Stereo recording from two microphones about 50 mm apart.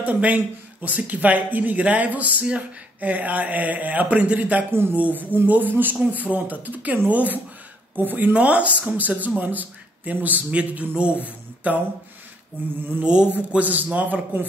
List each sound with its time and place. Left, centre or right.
0.0 s speech: right
8.3 s speech: right
12.6 s a sound: right
13.0 s a man's voice: centre
13.6 s speech: right